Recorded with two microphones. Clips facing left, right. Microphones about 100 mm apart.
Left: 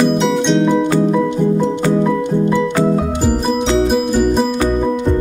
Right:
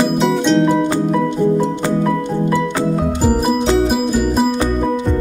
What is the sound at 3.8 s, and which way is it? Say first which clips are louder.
Music: left 2 dB; centre (ahead or behind).